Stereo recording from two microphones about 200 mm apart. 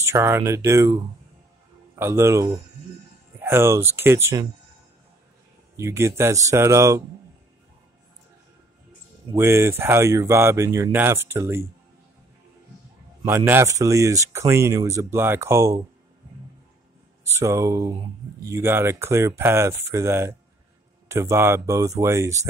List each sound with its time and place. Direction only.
0.0 s speech: 15° right (ahead or behind)
5.8 s speech: 15° right (ahead or behind)
9.3 s speech: 15° right (ahead or behind)
13.2 s speech: 15° right (ahead or behind)
17.3 s speech: 15° right (ahead or behind)